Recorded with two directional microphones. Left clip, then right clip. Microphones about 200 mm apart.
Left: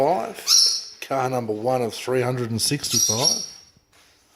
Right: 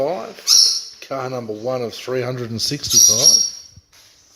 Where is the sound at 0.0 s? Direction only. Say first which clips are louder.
Left 1 dB; 45° left (ahead or behind).